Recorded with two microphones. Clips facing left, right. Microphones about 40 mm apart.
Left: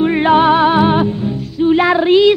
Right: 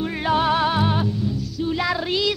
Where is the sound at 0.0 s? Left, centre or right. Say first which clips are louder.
Left 10 dB; left.